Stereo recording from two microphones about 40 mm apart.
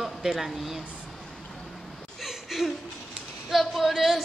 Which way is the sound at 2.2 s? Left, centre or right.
Centre.